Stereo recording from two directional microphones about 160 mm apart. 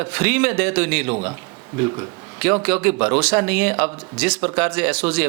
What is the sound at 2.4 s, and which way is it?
Speech, 10° right (ahead or behind).